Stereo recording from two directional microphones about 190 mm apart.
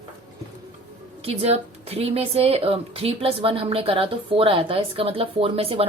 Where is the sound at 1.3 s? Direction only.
30° right (ahead or behind).